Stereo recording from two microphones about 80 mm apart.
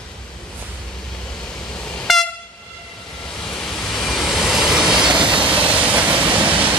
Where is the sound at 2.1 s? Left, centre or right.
Centre.